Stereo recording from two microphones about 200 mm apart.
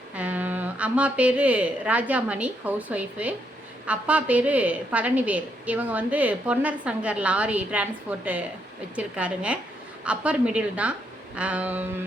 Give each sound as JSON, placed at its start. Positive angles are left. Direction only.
{"t": 0.1, "sound": "a woman's voice", "side_deg": -10}